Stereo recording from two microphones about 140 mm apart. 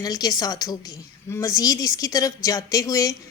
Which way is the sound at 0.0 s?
25° left (ahead or behind).